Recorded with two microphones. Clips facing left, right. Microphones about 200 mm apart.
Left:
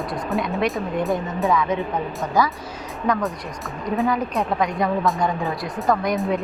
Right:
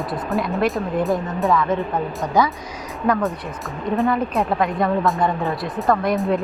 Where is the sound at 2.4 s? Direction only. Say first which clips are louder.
Right 2 dB; 20° right (ahead or behind).